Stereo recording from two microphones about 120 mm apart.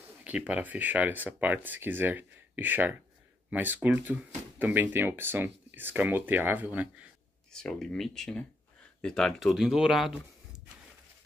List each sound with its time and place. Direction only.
0.2 s speech: 10° right (ahead or behind)
7.5 s speech: 5° left (ahead or behind)